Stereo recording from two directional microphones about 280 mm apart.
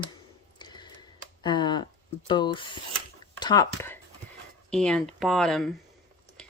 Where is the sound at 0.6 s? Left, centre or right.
Centre.